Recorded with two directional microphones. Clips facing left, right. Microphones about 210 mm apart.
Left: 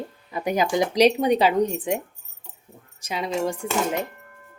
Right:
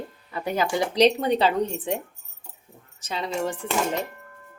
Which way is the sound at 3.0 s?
10° left (ahead or behind).